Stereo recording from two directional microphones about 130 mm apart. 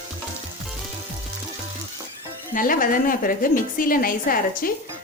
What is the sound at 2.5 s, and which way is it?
A woman's voice, 90° left.